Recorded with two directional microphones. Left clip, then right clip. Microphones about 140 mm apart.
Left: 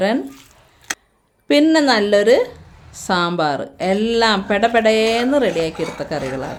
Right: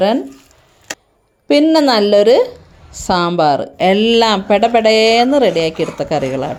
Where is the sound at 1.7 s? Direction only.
25° right (ahead or behind).